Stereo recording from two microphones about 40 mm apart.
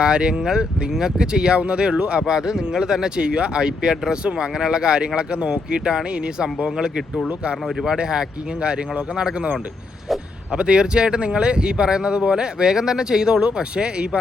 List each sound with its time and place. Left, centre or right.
0.0 s speech: right
1.5 s speech: right
3.2 s speech: right
10.5 s speech: right